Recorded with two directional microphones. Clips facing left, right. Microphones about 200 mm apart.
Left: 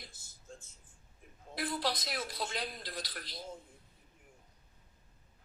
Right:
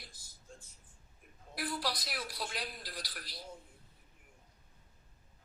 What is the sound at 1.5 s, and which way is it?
A woman's voice, 20° left (ahead or behind).